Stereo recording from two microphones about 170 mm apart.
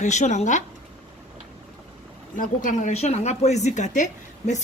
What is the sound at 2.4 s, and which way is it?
A woman's voice, 50° left (ahead or behind).